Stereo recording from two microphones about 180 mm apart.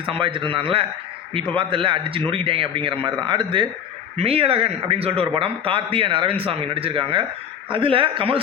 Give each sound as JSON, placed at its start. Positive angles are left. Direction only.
{"t": 0.0, "sound": "a man's voice", "side_deg": -30}